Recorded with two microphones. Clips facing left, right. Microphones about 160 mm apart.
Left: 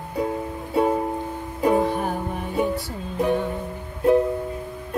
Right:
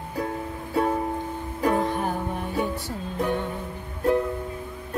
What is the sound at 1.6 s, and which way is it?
Music, 15° left (ahead or behind).